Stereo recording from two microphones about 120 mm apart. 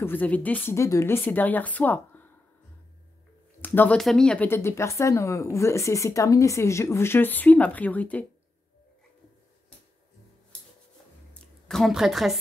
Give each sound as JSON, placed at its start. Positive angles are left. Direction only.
{"t": 0.0, "sound": "a woman's voice", "side_deg": 15}
{"t": 3.6, "sound": "speech", "side_deg": 15}
{"t": 4.0, "sound": "a woman's voice", "side_deg": 5}
{"t": 4.5, "sound": "a woman's voice", "side_deg": 20}
{"t": 11.3, "sound": "a woman's voice", "side_deg": 5}